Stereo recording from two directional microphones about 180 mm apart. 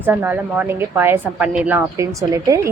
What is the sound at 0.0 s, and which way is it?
A woman's voice, 10° right (ahead or behind).